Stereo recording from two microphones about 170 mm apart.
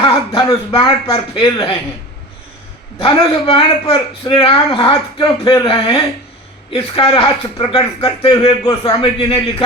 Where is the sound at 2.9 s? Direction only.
30° left (ahead or behind).